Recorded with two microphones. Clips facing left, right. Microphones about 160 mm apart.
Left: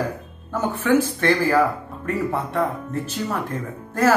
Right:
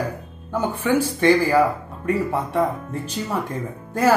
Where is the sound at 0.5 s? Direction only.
10° right (ahead or behind).